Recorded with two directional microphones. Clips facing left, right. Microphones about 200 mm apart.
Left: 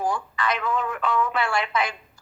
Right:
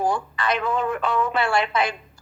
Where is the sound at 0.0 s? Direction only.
30° right (ahead or behind).